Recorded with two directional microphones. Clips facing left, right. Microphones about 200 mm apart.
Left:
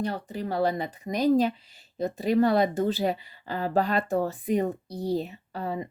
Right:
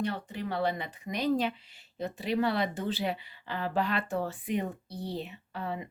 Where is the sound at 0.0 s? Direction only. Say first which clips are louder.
Left 3 dB; 40° left (ahead or behind).